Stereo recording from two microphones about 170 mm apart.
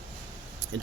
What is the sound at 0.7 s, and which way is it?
Speech, 90° right.